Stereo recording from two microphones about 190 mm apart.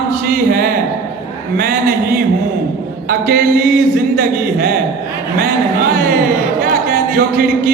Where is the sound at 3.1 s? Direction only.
50° right (ahead or behind).